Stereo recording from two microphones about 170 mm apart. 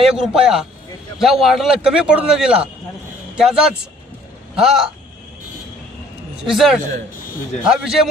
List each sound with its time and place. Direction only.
0.0 s a man's voice: 5° right (ahead or behind)
6.4 s a man's voice: centre (ahead or behind)